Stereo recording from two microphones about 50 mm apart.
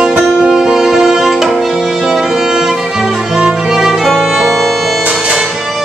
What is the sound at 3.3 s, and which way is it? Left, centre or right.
Music, centre.